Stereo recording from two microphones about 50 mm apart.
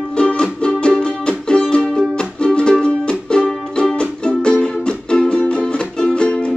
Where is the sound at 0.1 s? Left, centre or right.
Left.